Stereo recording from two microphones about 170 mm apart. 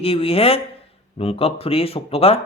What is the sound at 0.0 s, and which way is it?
Speech, 35° left (ahead or behind).